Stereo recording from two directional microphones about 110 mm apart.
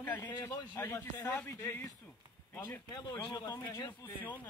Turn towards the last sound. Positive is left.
turn(degrees=40)  # may be behind; listen again after turning